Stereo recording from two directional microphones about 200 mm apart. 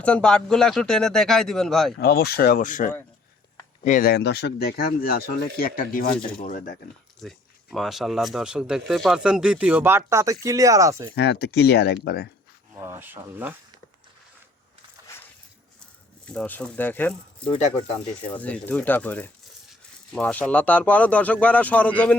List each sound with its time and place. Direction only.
0.0 s speech: 5° left (ahead or behind)
2.0 s speech: 55° left (ahead or behind)
7.2 s speech: centre (ahead or behind); by 11.1 s 15° right (ahead or behind)
11.1 s speech: 55° left (ahead or behind)
12.7 s speech: 10° right (ahead or behind)
15.0 s a sound: 15° left (ahead or behind)
16.2 s speech: 5° left (ahead or behind)